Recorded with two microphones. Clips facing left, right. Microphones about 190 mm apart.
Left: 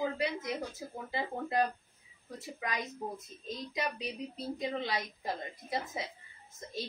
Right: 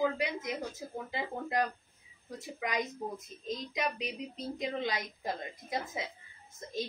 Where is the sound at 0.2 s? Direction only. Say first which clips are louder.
Left 1 dB; 20° right (ahead or behind).